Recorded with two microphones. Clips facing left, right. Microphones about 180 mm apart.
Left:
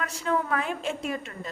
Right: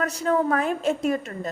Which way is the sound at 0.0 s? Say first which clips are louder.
Right 6 dB; 40° right (ahead or behind).